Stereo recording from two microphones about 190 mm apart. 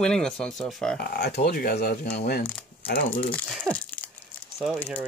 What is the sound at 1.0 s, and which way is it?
Speech, 55° left (ahead or behind).